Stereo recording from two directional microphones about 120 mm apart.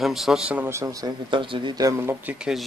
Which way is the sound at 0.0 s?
Centre (ahead or behind).